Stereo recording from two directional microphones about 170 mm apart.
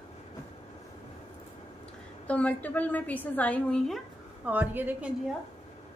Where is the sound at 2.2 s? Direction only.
10° left (ahead or behind).